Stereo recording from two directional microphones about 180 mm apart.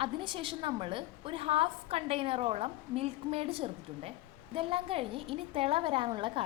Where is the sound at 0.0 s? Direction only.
30° right (ahead or behind).